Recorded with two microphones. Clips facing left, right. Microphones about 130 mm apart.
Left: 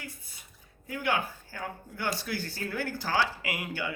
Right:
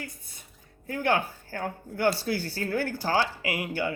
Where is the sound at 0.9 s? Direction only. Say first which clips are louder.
Right 4 dB; 45° right (ahead or behind).